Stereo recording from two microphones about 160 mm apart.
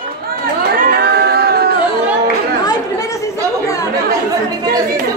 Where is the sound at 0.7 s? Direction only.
70° right (ahead or behind).